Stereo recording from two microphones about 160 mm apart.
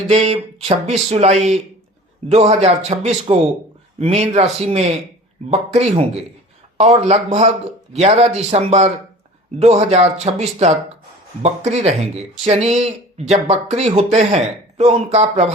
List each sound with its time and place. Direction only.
0.1 s speech: 40° right (ahead or behind)